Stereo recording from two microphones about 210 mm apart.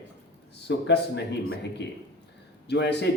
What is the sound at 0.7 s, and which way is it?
Speech, 55° left (ahead or behind).